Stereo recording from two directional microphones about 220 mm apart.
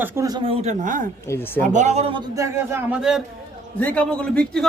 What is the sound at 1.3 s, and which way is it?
Speech, 10° left (ahead or behind).